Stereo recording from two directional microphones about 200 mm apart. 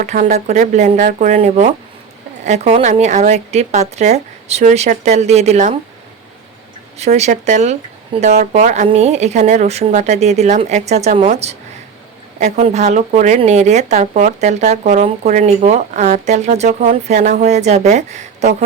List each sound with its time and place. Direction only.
0.0 s a woman's voice: 40° right (ahead or behind)
7.0 s a woman's voice: 35° right (ahead or behind)